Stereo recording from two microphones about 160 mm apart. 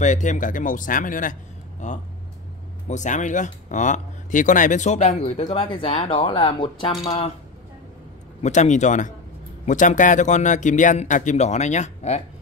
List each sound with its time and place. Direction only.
0.0 s speech: 50° left (ahead or behind); by 7.3 s 35° left (ahead or behind)
8.4 s speech: 45° left (ahead or behind)